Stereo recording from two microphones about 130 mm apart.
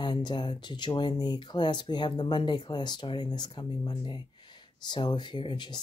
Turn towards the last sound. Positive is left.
turn(degrees=35)  # may be behind; listen again after turning